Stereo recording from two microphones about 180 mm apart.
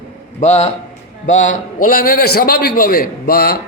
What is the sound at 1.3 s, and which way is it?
Speech, 90° left.